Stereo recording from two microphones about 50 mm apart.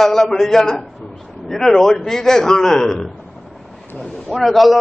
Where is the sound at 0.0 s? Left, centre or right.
Centre.